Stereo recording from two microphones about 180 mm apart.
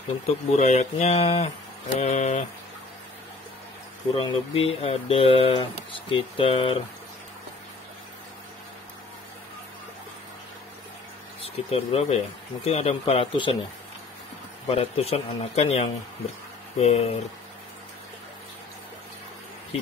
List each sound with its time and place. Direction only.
0.3 s speech: 40° left (ahead or behind)
4.1 s speech: 30° left (ahead or behind)
11.7 s speech: 35° left (ahead or behind)
14.7 s speech: 35° left (ahead or behind)